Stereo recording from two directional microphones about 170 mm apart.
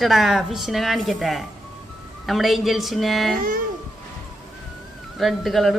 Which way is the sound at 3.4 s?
60° right (ahead or behind).